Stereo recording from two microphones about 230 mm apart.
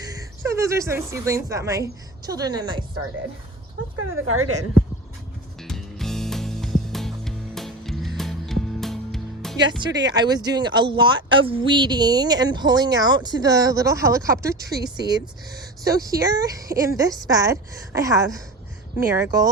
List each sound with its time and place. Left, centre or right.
0.1 s a woman's voice: centre
3.9 s speech: right
5.6 s music: centre
9.6 s speech: right
10.0 s speech: centre